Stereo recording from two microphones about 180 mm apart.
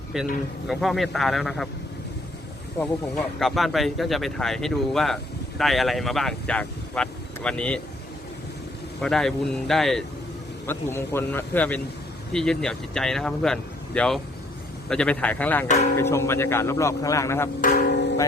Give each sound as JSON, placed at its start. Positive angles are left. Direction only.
{"t": 0.1, "sound": "speech", "side_deg": 0}
{"t": 3.2, "sound": "speech", "side_deg": 0}
{"t": 9.0, "sound": "speech", "side_deg": 5}
{"t": 10.7, "sound": "speech", "side_deg": 15}
{"t": 15.6, "sound": "speech", "side_deg": 40}
{"t": 16.0, "sound": "speech", "side_deg": 15}
{"t": 17.6, "sound": "music", "side_deg": 45}